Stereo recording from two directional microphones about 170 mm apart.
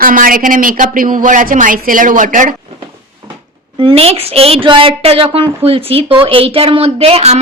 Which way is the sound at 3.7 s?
35° right (ahead or behind).